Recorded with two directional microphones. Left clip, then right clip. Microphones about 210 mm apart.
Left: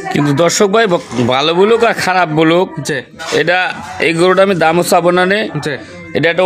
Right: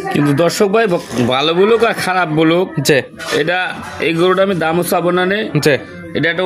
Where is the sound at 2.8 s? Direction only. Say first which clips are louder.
Right 6 dB; 35° right (ahead or behind).